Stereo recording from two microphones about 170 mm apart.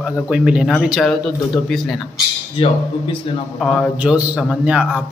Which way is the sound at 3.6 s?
Centre (ahead or behind).